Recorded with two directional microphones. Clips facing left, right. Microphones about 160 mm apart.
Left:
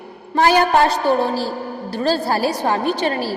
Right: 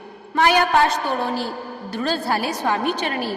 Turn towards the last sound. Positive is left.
turn(degrees=35)  # may be behind; listen again after turning